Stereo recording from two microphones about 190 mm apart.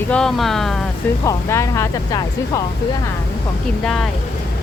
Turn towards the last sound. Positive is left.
turn(degrees=0)  # may be behind; listen again after turning